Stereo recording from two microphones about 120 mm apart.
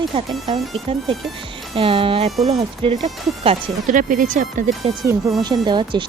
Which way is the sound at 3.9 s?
90° right.